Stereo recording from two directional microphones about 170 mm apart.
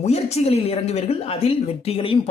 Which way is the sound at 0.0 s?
40° left (ahead or behind).